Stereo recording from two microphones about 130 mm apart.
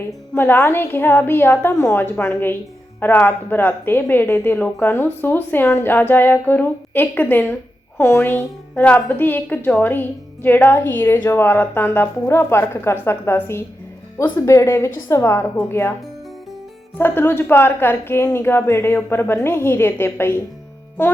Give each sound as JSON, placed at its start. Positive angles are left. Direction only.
{"t": 0.3, "sound": "a woman's voice", "side_deg": 15}
{"t": 17.0, "sound": "a woman's voice", "side_deg": 15}